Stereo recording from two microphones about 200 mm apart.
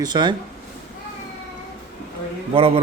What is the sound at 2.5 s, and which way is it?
Speech, 30° right (ahead or behind).